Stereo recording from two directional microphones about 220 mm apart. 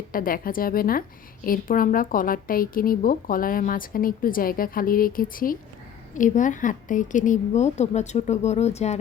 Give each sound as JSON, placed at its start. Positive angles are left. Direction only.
{"t": 0.1, "sound": "a woman's voice", "side_deg": 40}